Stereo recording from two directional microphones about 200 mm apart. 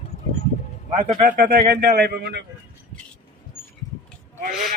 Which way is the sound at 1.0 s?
40° right (ahead or behind).